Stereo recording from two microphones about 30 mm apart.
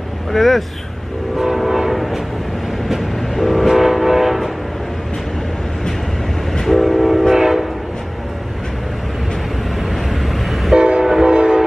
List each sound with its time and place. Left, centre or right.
0.3 s speech: centre
1.4 s train: centre
3.3 s train: centre
3.6 s train: centre
6.8 s train: centre
7.3 s train: centre
10.8 s train: right